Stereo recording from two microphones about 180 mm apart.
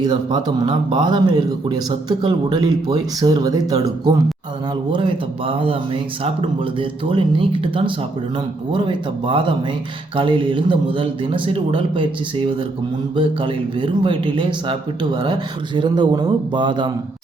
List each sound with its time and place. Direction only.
0.0 s speech: 25° right (ahead or behind)
13.1 s speech: 25° right (ahead or behind)